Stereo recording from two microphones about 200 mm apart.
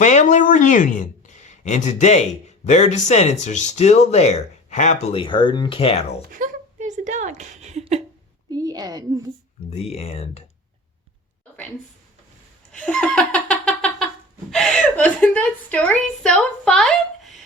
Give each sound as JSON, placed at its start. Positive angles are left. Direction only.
{"t": 0.0, "sound": "speech", "side_deg": 35}
{"t": 6.3, "sound": "a sound", "side_deg": -40}
{"t": 8.4, "sound": "a sound", "side_deg": -20}
{"t": 9.9, "sound": "speech", "side_deg": 30}
{"t": 12.7, "sound": "laughter", "side_deg": 5}
{"t": 14.5, "sound": "a woman's voice", "side_deg": 5}